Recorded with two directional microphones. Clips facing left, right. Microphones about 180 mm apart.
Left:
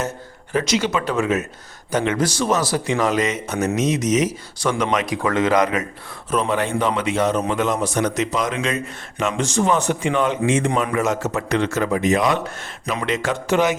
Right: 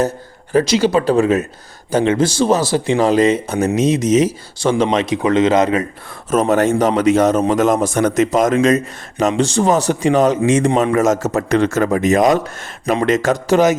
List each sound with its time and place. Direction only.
0.5 s speech: 35° right (ahead or behind)
6.3 s a man's voice: 45° right (ahead or behind)